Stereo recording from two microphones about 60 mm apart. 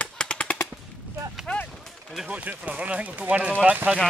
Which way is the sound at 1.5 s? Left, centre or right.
Centre.